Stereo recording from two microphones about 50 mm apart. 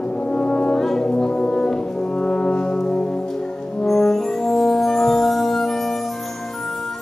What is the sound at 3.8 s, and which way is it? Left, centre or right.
Brass instrument, centre.